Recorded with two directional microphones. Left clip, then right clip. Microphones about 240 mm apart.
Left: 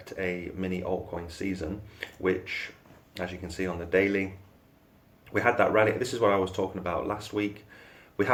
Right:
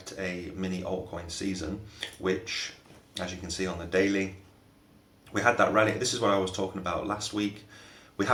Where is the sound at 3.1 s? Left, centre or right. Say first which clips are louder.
Even; left.